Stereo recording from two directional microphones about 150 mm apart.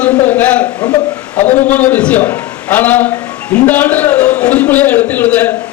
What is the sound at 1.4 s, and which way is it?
Speech, 50° left (ahead or behind).